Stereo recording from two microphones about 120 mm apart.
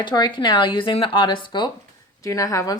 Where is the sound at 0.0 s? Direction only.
40° left (ahead or behind).